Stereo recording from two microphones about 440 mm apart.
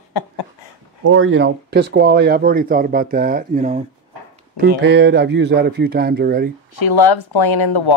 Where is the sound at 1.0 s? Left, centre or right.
Right.